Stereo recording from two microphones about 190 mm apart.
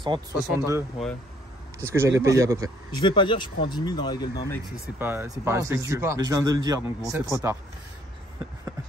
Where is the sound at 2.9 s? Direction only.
25° left (ahead or behind).